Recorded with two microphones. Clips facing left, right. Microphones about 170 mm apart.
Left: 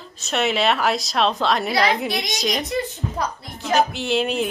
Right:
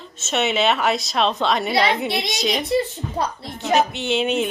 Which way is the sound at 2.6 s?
30° right (ahead or behind).